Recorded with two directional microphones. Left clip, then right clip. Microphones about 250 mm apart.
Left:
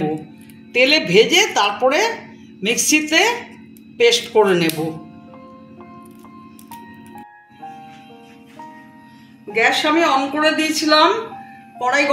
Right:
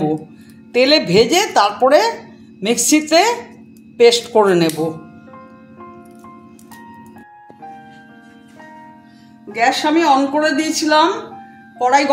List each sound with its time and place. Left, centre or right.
0.7 s speech: right
9.5 s speech: right